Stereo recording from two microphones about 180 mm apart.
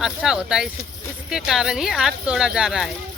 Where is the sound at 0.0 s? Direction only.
5° right (ahead or behind).